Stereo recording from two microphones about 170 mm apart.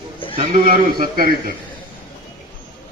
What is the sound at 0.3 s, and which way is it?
A man's voice, 50° right (ahead or behind).